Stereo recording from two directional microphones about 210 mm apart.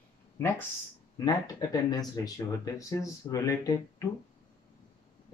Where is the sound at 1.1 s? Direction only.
15° left (ahead or behind).